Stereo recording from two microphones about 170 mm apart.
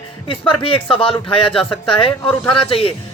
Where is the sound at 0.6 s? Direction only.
30° left (ahead or behind).